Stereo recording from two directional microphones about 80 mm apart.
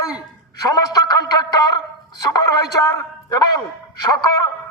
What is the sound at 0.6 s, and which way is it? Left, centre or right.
A man's voice, left.